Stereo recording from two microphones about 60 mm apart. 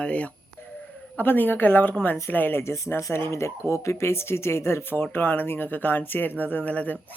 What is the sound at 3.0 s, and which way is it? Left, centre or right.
Speech, left.